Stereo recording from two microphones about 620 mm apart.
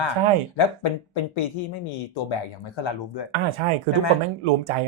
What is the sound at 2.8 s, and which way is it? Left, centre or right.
Speech, left.